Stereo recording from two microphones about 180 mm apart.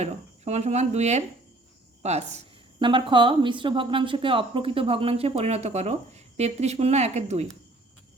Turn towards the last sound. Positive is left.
turn(degrees=-40)  # may be behind; listen again after turning